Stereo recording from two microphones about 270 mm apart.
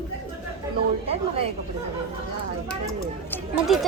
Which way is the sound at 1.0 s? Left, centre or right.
Right.